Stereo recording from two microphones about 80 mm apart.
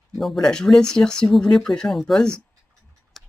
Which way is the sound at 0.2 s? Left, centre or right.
Centre.